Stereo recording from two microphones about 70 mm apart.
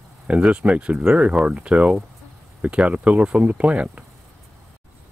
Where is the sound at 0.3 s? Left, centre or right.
Centre.